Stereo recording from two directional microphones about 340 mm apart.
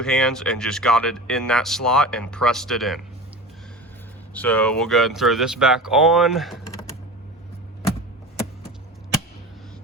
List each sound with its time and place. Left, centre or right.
0.0 s speech: centre
4.4 s speech: centre